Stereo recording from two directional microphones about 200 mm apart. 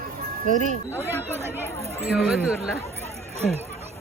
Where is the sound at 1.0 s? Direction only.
10° right (ahead or behind).